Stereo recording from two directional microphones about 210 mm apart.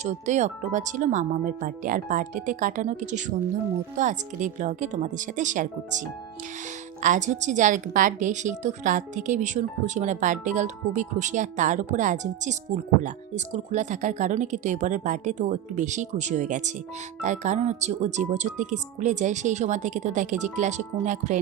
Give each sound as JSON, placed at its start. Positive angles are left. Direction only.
{"t": 0.0, "sound": "a woman's voice", "side_deg": -35}
{"t": 7.0, "sound": "a woman's voice", "side_deg": -35}